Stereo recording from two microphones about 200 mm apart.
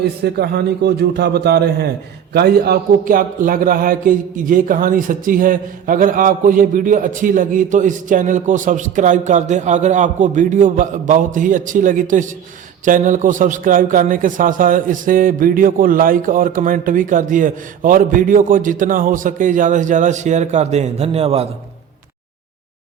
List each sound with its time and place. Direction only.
0.0 s a man's voice: 55° right (ahead or behind); by 21.4 s 30° right (ahead or behind)